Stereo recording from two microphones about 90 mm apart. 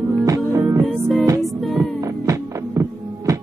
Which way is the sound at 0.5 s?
35° right (ahead or behind).